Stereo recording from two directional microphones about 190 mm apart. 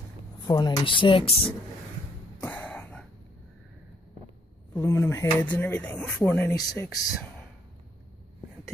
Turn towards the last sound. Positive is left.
turn(degrees=20)  # may be behind; listen again after turning